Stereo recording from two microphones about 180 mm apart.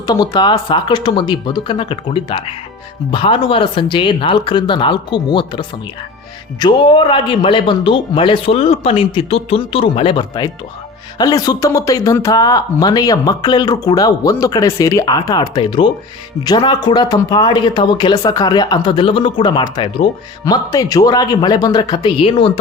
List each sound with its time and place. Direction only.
0.0 s speech: 25° left (ahead or behind)